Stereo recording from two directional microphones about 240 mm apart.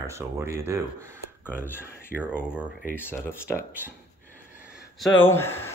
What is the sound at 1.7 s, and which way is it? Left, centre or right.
Speech, centre.